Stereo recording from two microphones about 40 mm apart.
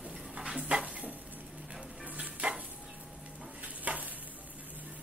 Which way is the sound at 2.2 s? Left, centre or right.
Right.